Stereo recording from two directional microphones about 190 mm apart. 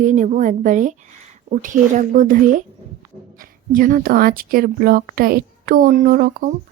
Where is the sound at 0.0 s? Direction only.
40° right (ahead or behind).